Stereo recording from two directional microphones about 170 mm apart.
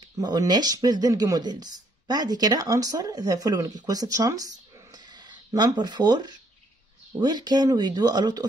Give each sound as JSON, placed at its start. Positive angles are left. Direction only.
{"t": 0.2, "sound": "speech", "side_deg": -25}
{"t": 4.9, "sound": "a sound", "side_deg": -25}
{"t": 7.1, "sound": "speech", "side_deg": -25}